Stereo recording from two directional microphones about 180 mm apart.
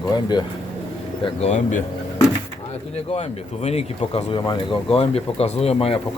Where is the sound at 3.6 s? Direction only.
35° left (ahead or behind).